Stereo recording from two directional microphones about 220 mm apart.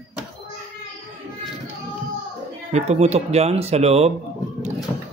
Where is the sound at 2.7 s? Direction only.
30° right (ahead or behind).